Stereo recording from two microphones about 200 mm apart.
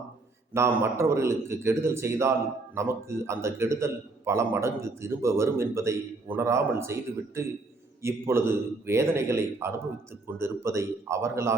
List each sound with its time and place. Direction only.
0.5 s a man's voice: 15° right (ahead or behind)